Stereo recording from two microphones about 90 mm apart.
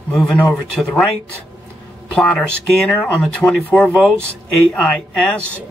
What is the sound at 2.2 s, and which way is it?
A man's voice, 10° left (ahead or behind).